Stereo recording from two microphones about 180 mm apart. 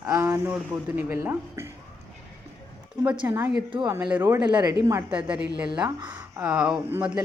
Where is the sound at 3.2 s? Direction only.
10° right (ahead or behind).